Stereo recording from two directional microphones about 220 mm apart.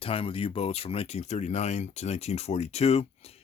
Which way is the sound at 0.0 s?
25° left (ahead or behind).